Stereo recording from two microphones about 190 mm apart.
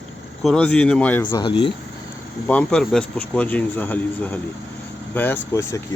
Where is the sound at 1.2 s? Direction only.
25° left (ahead or behind).